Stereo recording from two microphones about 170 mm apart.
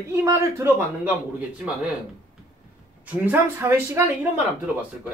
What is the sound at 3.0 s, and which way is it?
Speech, 10° right (ahead or behind).